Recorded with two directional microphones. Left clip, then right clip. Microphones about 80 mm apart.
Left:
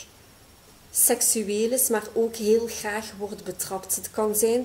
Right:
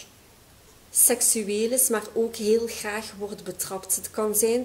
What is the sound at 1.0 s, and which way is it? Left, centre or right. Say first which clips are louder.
A woman's voice: left 1 dB; right.